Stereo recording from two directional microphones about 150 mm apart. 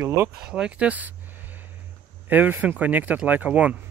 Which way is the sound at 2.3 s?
10° right (ahead or behind).